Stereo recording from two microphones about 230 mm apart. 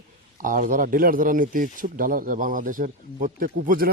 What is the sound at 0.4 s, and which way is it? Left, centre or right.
Speech, right.